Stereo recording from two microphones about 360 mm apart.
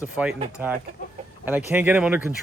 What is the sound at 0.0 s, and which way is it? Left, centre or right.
Speech, centre.